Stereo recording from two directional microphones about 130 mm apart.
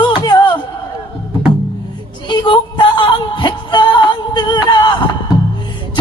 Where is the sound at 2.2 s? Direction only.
35° left (ahead or behind).